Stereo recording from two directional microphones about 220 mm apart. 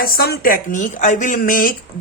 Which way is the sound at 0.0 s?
45° left (ahead or behind).